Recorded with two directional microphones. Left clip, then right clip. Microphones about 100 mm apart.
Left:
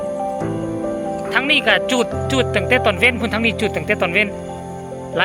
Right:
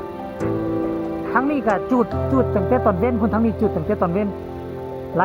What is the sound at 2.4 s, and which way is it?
Speech, 40° left (ahead or behind).